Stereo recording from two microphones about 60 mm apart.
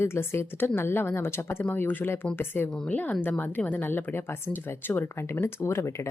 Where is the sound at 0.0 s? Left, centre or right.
Left.